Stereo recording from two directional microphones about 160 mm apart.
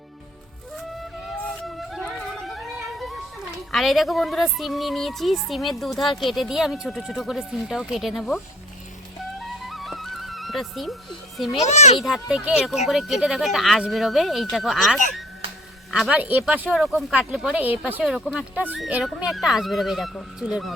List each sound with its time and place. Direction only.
1.4 s music: centre (ahead or behind)
3.7 s speech: centre (ahead or behind)
9.5 s music: centre (ahead or behind)
11.6 s a child's voice: 45° left (ahead or behind)
11.9 s speech: centre (ahead or behind)